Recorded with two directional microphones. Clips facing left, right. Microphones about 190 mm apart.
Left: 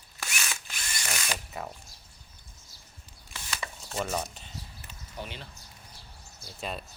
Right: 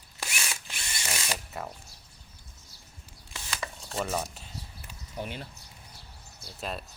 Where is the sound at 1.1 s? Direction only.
25° right (ahead or behind).